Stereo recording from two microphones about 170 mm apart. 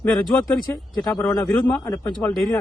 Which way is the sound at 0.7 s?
10° left (ahead or behind).